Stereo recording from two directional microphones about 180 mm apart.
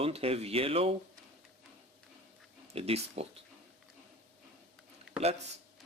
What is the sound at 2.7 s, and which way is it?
Speech, 35° right (ahead or behind).